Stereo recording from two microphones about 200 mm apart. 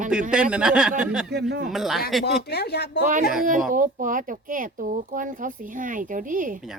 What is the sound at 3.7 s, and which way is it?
Speech, 40° right (ahead or behind).